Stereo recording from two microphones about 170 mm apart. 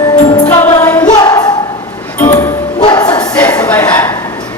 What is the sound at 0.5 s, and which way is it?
Music, 15° left (ahead or behind).